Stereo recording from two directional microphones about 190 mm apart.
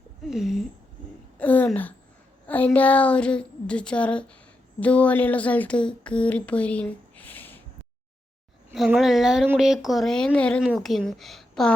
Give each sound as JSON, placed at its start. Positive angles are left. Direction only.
{"t": 0.3, "sound": "speech", "side_deg": 0}
{"t": 1.4, "sound": "a sound", "side_deg": 10}
{"t": 2.5, "sound": "speech", "side_deg": 10}
{"t": 8.7, "sound": "speech", "side_deg": 0}